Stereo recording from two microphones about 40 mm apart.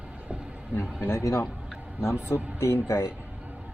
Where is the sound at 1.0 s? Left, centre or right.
Left.